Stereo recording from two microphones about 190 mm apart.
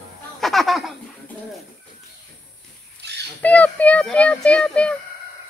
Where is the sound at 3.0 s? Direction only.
60° right (ahead or behind).